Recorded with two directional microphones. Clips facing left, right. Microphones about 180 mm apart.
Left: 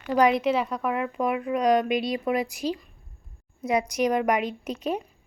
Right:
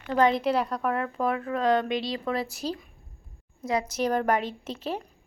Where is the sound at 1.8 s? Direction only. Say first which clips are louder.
Left 3 dB; 25° right (ahead or behind).